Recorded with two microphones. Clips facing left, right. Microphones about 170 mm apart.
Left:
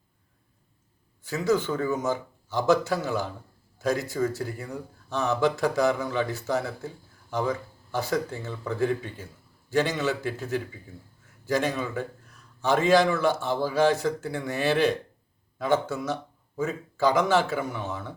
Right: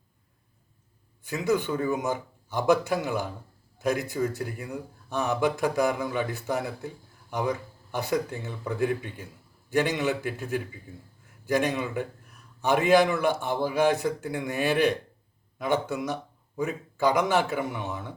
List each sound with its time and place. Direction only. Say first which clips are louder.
1.3 s a man's voice: left 1 dB; 15° right (ahead or behind)